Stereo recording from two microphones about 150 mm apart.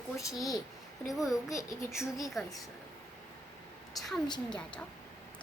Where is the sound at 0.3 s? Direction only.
Centre (ahead or behind).